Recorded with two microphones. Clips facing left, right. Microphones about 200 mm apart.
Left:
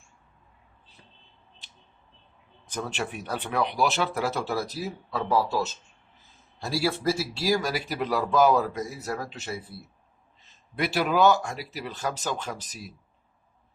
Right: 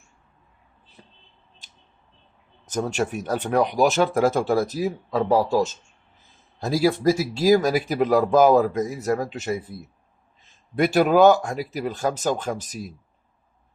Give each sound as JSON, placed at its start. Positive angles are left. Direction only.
{"t": 2.6, "sound": "speech", "side_deg": -45}
{"t": 10.8, "sound": "speech", "side_deg": -45}